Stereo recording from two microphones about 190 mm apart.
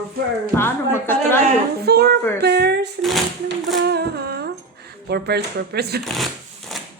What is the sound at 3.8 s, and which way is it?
Humming, 60° right (ahead or behind).